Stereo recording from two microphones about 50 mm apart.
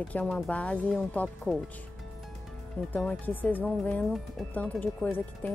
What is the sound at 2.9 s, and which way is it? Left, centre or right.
Speech, left.